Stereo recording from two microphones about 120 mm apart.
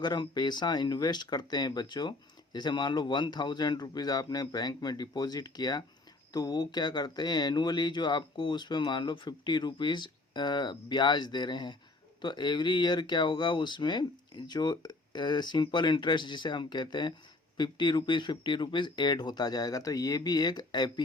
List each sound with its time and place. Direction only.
0.0 s speech: 40° left (ahead or behind)